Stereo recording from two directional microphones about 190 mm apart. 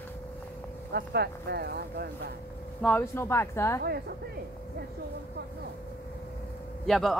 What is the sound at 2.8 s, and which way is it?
Speech, 10° left (ahead or behind).